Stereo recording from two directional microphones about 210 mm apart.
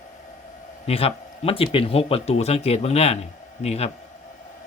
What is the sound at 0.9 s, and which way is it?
Speech, 30° left (ahead or behind).